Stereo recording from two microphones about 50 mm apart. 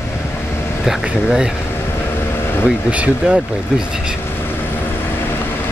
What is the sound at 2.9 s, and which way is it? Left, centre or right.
Speech, right.